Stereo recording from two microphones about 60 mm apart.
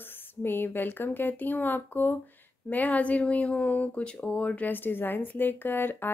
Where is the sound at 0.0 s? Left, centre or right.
Left.